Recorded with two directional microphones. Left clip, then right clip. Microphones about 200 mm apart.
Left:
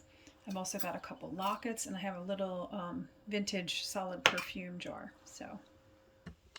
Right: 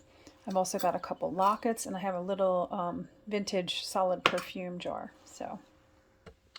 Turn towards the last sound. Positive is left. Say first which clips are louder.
# right 8 dB
turn(degrees=-20)  # may be behind; listen again after turning